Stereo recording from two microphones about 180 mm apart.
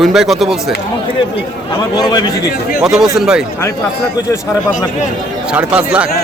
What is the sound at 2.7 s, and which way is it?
Speech, 5° right (ahead or behind).